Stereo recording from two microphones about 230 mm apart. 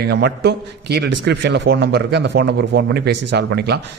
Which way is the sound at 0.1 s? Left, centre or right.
Right.